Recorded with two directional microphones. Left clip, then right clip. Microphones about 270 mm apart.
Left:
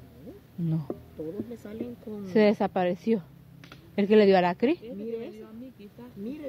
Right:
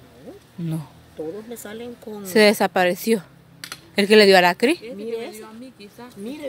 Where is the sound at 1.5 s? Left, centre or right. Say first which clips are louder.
Right 7 dB; centre.